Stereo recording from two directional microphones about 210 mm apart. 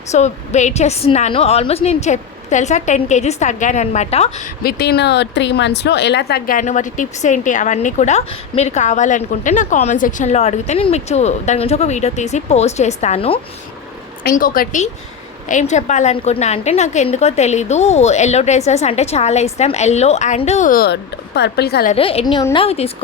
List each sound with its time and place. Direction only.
0.1 s speech: 35° left (ahead or behind)
4.6 s speech: 50° left (ahead or behind); by 13.4 s 25° left (ahead or behind)
14.3 s speech: 40° left (ahead or behind)
21.9 s a woman's voice: 25° left (ahead or behind)